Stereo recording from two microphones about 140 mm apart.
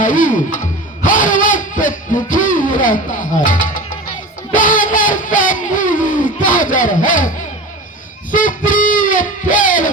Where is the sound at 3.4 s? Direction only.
70° left (ahead or behind).